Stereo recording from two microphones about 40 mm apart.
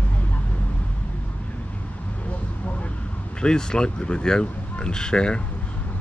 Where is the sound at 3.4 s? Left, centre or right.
Centre.